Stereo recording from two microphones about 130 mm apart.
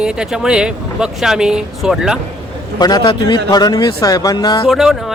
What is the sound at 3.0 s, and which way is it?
Speech, 35° left (ahead or behind).